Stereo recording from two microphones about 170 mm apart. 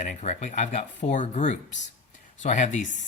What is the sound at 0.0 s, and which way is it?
A woman's voice, 40° left (ahead or behind).